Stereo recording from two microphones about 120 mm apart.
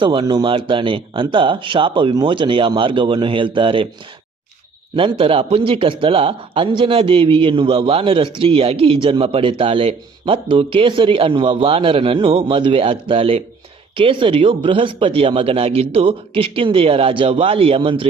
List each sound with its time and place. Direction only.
0.0 s speech: 40° right (ahead or behind)
4.9 s speech: 50° right (ahead or behind)